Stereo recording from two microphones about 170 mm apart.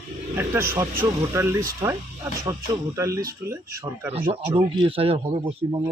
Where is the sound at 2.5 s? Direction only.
20° right (ahead or behind).